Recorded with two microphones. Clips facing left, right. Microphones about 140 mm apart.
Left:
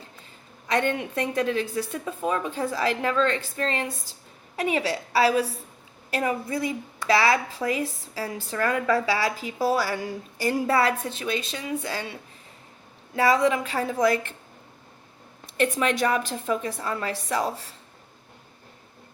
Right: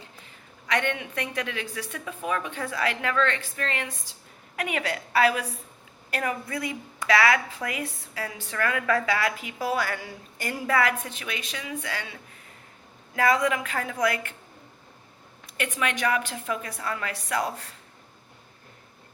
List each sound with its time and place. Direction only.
0.7 s a woman's voice: 35° left (ahead or behind)
13.1 s a woman's voice: 30° left (ahead or behind)
15.5 s a woman's voice: 35° left (ahead or behind)